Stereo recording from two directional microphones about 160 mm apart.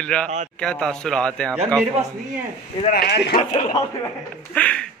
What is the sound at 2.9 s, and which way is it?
Speech, 85° left.